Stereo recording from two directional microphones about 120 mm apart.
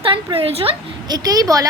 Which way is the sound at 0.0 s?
45° right (ahead or behind).